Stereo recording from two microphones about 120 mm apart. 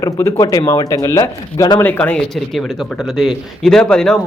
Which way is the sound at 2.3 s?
Centre (ahead or behind).